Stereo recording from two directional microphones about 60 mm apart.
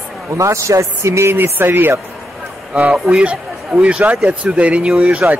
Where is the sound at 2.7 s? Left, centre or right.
Right.